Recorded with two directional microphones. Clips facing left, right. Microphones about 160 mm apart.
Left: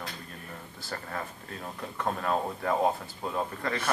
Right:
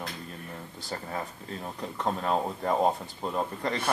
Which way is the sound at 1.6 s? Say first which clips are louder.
Right 1 dB; 20° right (ahead or behind).